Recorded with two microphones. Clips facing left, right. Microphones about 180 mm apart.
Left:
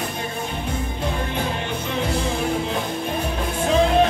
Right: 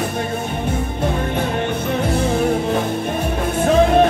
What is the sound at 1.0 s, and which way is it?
Music, 55° right (ahead or behind).